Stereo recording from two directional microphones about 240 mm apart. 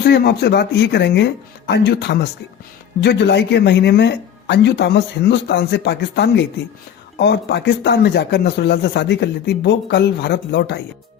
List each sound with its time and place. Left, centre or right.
0.0 s speech: left